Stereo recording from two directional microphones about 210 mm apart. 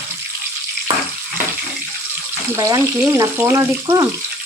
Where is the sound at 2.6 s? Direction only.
15° right (ahead or behind).